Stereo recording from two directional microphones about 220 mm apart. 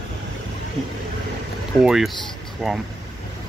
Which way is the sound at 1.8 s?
Centre (ahead or behind).